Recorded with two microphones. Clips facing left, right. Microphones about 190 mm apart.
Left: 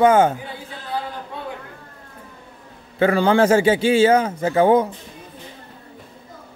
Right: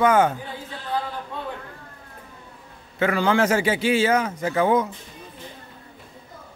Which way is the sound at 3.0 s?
30° left (ahead or behind).